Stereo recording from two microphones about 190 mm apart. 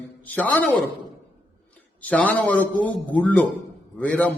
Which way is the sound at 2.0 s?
10° left (ahead or behind).